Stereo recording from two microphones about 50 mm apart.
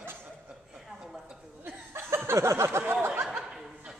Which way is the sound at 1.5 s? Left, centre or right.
Right.